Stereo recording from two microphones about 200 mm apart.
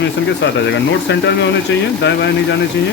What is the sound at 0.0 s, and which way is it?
A man's voice, 60° left (ahead or behind).